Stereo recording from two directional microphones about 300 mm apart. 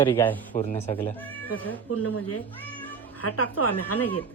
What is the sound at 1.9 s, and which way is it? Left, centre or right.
A woman's voice, left.